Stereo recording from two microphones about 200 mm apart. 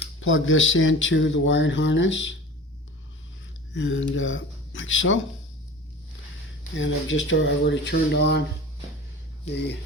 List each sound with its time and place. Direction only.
0.2 s speech: 80° left
3.8 s speech: 70° left (ahead or behind)
6.7 s speech: 70° left (ahead or behind)